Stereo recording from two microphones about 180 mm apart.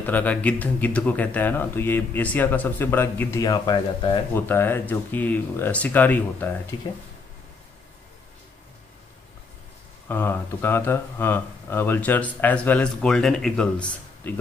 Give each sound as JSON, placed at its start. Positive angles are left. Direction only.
{"t": 0.0, "sound": "speech", "side_deg": 10}
{"t": 4.3, "sound": "speech", "side_deg": 10}
{"t": 6.7, "sound": "speech", "side_deg": 25}
{"t": 10.0, "sound": "speech", "side_deg": 10}